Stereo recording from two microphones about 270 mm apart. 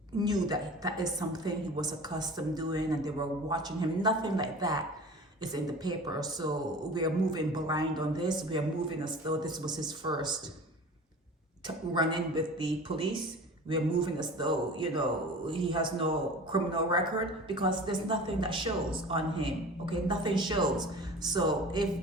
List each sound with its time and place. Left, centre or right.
0.2 s a woman's voice: centre
11.9 s a woman's voice: centre